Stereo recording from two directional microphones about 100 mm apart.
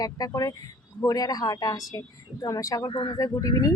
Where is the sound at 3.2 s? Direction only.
35° left (ahead or behind).